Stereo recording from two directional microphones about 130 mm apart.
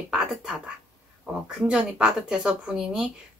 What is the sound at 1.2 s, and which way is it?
Speech, 5° right (ahead or behind).